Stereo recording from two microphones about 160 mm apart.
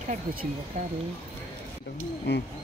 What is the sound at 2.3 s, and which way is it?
Speech, 90° left.